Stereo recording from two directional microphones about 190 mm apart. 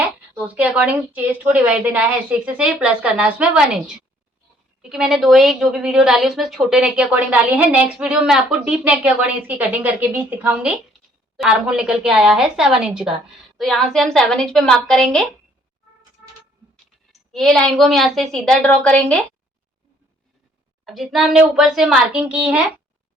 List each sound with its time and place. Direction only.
0.3 s a woman's voice: 5° right (ahead or behind)
17.1 s a woman's voice: centre (ahead or behind)
20.8 s a woman's voice: centre (ahead or behind)